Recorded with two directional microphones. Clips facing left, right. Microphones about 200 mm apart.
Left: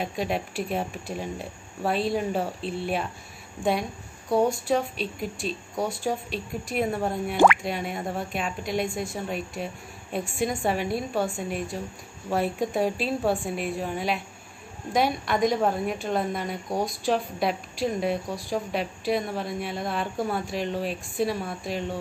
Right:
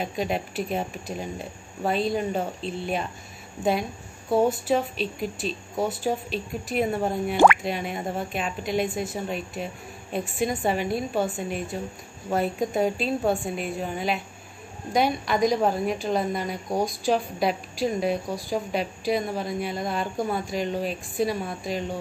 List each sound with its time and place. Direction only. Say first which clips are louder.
0.0 s speech: right 1 dB; centre (ahead or behind)